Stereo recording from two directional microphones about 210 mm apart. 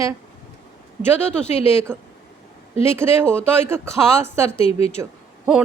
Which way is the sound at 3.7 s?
10° right (ahead or behind).